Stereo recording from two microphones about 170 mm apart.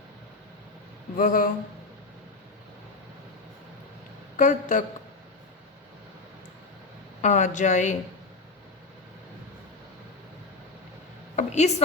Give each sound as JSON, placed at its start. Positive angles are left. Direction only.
{"t": 1.1, "sound": "speech", "side_deg": 55}
{"t": 4.4, "sound": "speech", "side_deg": 50}
{"t": 7.2, "sound": "speech", "side_deg": 45}
{"t": 11.3, "sound": "a sound", "side_deg": 40}